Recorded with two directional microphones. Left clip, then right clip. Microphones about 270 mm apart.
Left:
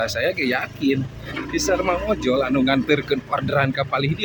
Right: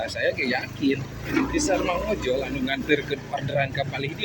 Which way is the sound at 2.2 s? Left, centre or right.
Left.